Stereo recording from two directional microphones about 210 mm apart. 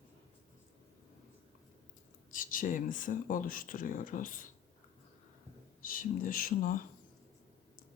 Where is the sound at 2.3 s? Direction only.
40° left (ahead or behind).